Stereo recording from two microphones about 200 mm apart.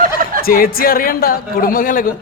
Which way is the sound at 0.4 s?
45° left (ahead or behind).